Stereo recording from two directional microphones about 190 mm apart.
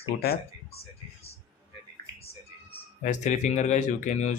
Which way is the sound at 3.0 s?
40° left (ahead or behind).